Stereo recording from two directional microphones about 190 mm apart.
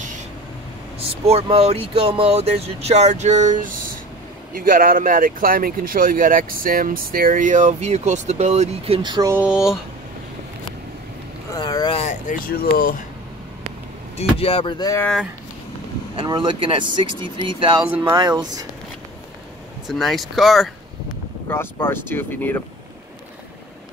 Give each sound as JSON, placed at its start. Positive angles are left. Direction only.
{"t": 1.2, "sound": "speech", "side_deg": -35}
{"t": 11.5, "sound": "boat", "side_deg": 20}
{"t": 12.0, "sound": "speech", "side_deg": 40}
{"t": 14.1, "sound": "speech", "side_deg": 30}
{"t": 16.2, "sound": "speech", "side_deg": -25}
{"t": 17.8, "sound": "speech", "side_deg": -10}
{"t": 18.1, "sound": "speech", "side_deg": -20}
{"t": 19.9, "sound": "speech", "side_deg": 0}
{"t": 21.5, "sound": "speech", "side_deg": 10}